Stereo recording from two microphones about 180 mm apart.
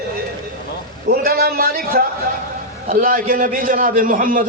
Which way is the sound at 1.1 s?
55° right (ahead or behind).